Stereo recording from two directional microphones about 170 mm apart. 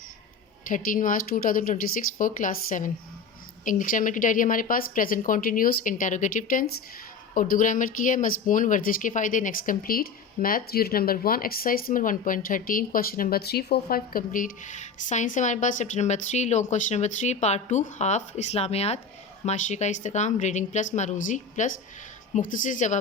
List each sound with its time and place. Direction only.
0.7 s speech: 55° left (ahead or behind)